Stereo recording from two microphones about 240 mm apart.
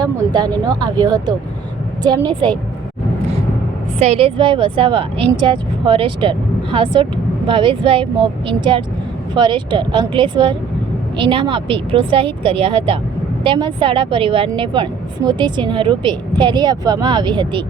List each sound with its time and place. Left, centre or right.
0.0 s speech: centre
4.0 s a woman's voice: right